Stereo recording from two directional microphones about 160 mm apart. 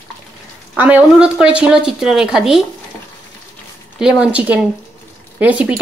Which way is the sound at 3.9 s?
5° right (ahead or behind).